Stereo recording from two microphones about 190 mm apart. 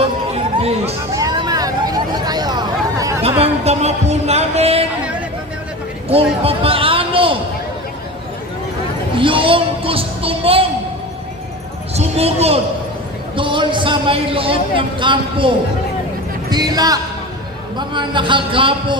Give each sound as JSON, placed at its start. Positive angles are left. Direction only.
{"t": 0.3, "sound": "music", "side_deg": -35}
{"t": 1.1, "sound": "hubbub", "side_deg": -20}
{"t": 3.4, "sound": "a sound", "side_deg": -35}
{"t": 6.1, "sound": "speech", "side_deg": -30}
{"t": 9.1, "sound": "speech", "side_deg": -25}
{"t": 11.9, "sound": "a man's voice", "side_deg": -35}